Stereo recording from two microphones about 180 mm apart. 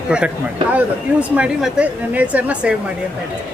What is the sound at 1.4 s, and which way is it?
A woman's voice, 5° right (ahead or behind).